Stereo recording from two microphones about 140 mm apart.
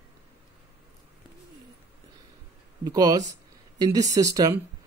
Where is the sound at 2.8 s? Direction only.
30° right (ahead or behind).